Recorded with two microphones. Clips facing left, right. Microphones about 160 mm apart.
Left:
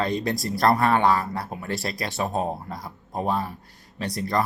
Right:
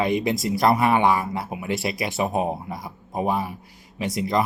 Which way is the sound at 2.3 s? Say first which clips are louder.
Right 2 dB; 20° right (ahead or behind).